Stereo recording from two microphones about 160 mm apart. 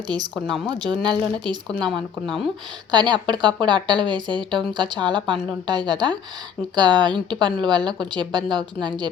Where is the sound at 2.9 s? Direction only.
25° right (ahead or behind).